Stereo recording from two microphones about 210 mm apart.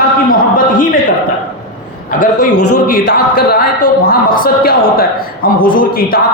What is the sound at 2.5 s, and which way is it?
Speech, 90° left.